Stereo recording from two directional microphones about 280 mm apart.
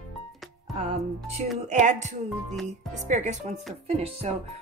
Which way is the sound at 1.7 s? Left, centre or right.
Right.